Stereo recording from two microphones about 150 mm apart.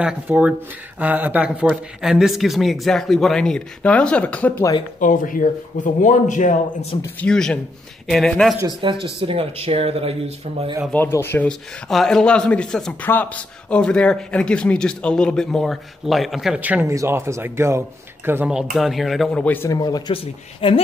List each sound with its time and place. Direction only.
0.0 s speech: 10° right (ahead or behind); by 4.6 s 10° left (ahead or behind)
5.0 s a man's voice: 60° left (ahead or behind)
7.2 s speech: 5° left (ahead or behind)
8.6 s speech: 35° right (ahead or behind)
10.9 s speech: 15° left (ahead or behind)
11.9 s speech: 5° left (ahead or behind)
19.8 s speech: 25° left (ahead or behind)
20.6 s a woman's voice: 35° left (ahead or behind)